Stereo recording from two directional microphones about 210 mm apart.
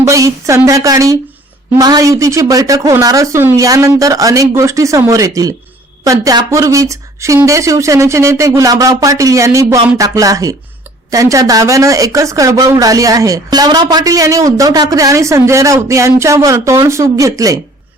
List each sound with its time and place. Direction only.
0.0 s speech: 15° right (ahead or behind)